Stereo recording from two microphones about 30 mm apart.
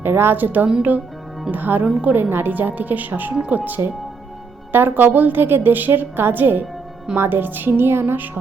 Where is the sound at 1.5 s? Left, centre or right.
Right.